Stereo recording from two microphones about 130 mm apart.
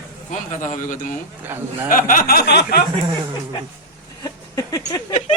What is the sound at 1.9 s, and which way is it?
Speech, 90° left.